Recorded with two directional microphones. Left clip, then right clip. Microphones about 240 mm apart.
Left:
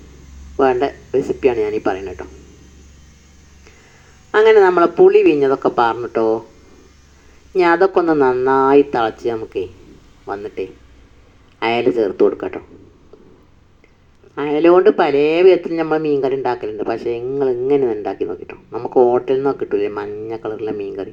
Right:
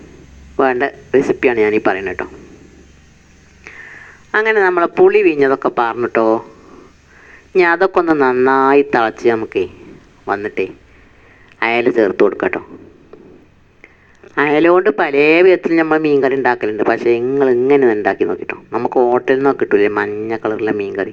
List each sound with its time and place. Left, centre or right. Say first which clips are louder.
0.5 s speech: right 1 dB; centre
4.3 s speech: left 3 dB; right
7.5 s speech: right 1 dB; right
11.6 s speech: right 3 dB; right
14.5 s speech: left 1 dB; right